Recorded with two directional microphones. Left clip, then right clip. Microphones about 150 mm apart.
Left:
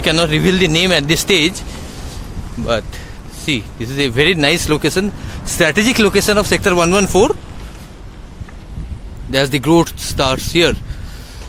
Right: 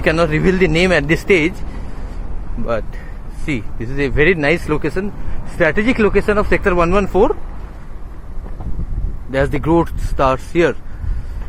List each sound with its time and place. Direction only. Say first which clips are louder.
0.0 s speech: left 1 dB; 15° left (ahead or behind)
3.4 s speech: left 4 dB; 15° left (ahead or behind)
4.2 s speech: left 1 dB; 30° left (ahead or behind)
9.3 s speech: left 3 dB; 25° left (ahead or behind)